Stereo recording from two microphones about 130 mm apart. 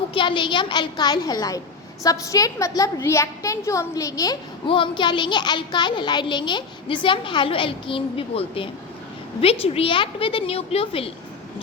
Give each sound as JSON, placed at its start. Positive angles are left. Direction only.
{"t": 0.1, "sound": "a woman's voice", "side_deg": 40}
{"t": 4.6, "sound": "a woman's voice", "side_deg": 40}